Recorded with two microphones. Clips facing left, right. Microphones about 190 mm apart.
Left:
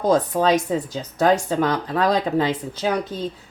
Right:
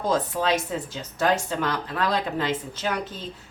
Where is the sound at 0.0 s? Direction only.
45° left (ahead or behind).